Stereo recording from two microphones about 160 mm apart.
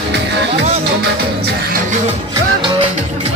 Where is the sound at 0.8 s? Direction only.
90° right.